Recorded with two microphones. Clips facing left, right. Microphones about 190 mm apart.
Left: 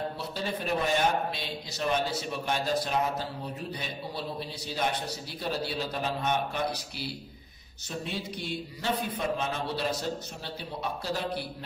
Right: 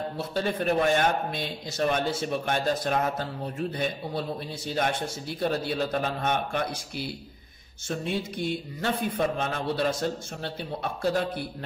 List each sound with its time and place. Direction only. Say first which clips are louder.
0.2 s a man's voice: right 5 dB; 50° right (ahead or behind)